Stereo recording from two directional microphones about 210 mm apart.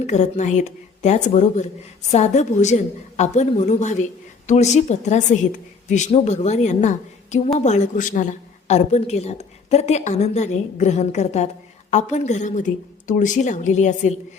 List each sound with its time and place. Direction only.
0.0 s a woman's voice: 35° left (ahead or behind)